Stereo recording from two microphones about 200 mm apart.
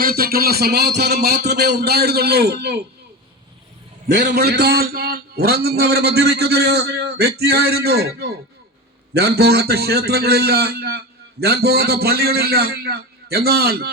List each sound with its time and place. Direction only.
0.0 s a man's voice: 50° right (ahead or behind)
4.1 s a man's voice: 55° right (ahead or behind)